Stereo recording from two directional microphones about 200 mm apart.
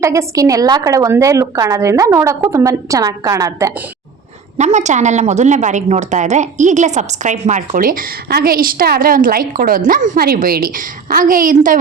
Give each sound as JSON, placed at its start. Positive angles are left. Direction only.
{"t": 0.0, "sound": "a woman's voice", "side_deg": -15}
{"t": 4.5, "sound": "a woman's voice", "side_deg": -35}